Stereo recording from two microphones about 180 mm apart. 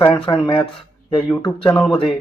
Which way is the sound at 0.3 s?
30° left (ahead or behind).